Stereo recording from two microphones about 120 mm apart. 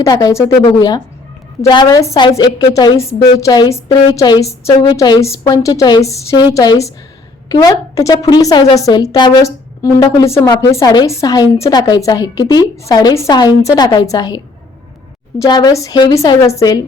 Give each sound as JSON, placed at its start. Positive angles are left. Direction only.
{"t": 0.0, "sound": "a woman's voice", "side_deg": 30}
{"t": 15.4, "sound": "a woman's voice", "side_deg": 35}
{"t": 15.7, "sound": "a woman's voice", "side_deg": 25}